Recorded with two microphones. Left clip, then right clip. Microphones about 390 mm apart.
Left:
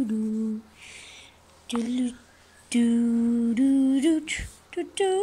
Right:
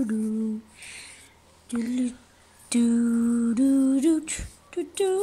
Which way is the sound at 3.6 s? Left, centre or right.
Right.